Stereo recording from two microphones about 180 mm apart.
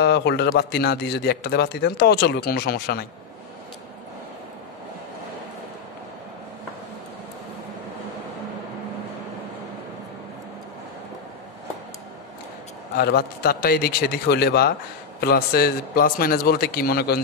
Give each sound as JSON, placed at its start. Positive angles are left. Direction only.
{"t": 0.0, "sound": "a man's voice", "side_deg": 65}
{"t": 12.9, "sound": "a man's voice", "side_deg": 60}